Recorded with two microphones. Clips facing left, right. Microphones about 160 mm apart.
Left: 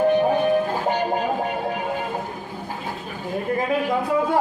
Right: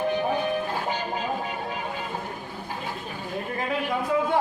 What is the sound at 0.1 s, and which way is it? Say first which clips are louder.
Music: left 7 dB; 55° left (ahead or behind).